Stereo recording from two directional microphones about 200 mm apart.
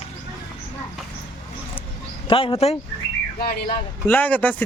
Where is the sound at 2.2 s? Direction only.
25° left (ahead or behind).